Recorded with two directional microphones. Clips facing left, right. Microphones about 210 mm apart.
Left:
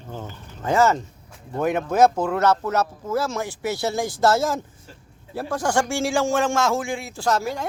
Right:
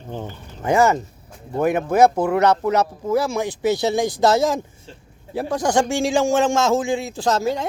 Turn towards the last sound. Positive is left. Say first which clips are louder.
# right 3 dB
turn(degrees=-20)  # may be behind; listen again after turning